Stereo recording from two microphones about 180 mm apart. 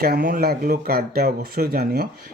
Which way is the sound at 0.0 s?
55° right (ahead or behind).